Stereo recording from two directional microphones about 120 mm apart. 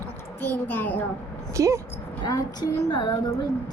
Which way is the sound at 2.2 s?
35° left (ahead or behind).